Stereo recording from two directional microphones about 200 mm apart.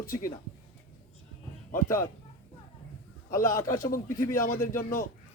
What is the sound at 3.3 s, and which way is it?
A man's voice, 45° left (ahead or behind).